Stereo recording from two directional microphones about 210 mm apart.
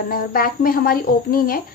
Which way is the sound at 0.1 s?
45° left (ahead or behind).